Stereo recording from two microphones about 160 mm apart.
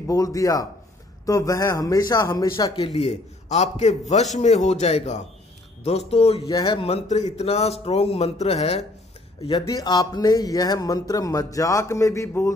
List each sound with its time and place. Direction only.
0.0 s speech: 20° left (ahead or behind); by 8.8 s 40° left (ahead or behind)
9.7 s speech: 25° left (ahead or behind)